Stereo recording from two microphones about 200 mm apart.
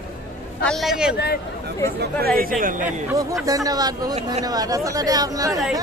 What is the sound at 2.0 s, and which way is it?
Speech, 50° right (ahead or behind).